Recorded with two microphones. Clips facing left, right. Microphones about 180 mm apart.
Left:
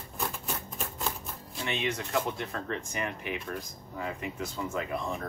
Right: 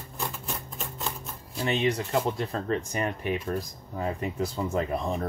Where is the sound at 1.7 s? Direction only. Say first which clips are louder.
Right 6 dB; 30° right (ahead or behind).